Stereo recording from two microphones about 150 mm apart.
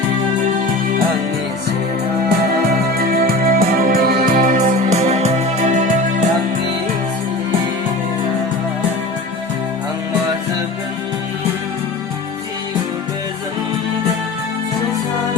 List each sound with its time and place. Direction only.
2.6 s music: 85° right
4.5 s music: 50° right (ahead or behind)